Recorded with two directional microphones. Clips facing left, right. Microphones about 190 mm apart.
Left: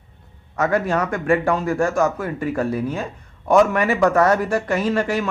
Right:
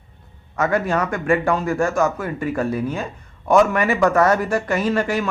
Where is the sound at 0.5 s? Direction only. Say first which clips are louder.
Even; 35° left (ahead or behind).